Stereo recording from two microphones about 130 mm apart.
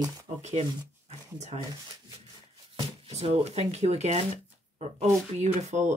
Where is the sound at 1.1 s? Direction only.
60° right (ahead or behind).